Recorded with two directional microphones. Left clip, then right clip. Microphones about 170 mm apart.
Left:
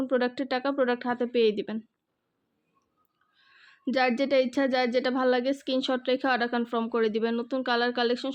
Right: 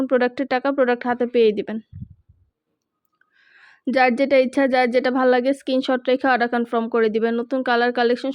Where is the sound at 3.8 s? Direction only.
30° right (ahead or behind).